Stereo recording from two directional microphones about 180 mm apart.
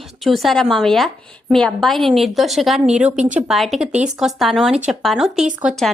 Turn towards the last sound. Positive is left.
turn(degrees=0)  # may be behind; listen again after turning